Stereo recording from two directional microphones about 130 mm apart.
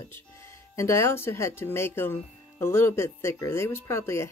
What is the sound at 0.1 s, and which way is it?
Speech, 20° left (ahead or behind).